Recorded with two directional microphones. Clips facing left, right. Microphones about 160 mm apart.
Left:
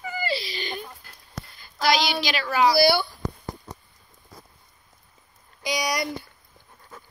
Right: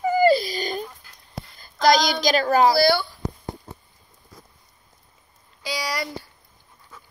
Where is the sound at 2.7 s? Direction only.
15° left (ahead or behind).